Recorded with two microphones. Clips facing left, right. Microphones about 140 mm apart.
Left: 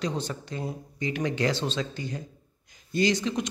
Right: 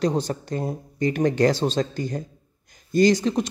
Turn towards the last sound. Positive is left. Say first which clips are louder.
# right 7 dB
turn(degrees=-40)  # may be behind; listen again after turning